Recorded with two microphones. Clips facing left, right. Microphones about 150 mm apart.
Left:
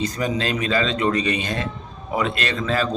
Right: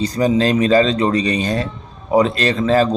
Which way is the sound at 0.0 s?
35° right (ahead or behind).